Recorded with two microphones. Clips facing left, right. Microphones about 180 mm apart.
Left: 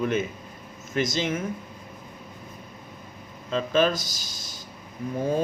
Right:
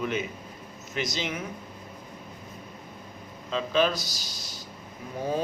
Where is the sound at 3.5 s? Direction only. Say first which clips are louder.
Left 2 dB; 50° left (ahead or behind).